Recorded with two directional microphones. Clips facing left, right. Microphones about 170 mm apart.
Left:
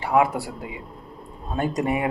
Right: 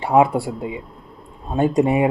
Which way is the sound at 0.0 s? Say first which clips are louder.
Right 5 dB; 25° right (ahead or behind).